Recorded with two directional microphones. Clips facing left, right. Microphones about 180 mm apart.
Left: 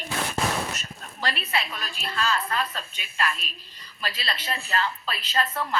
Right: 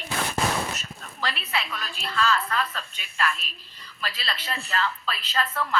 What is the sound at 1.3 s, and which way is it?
Speech, 45° left (ahead or behind).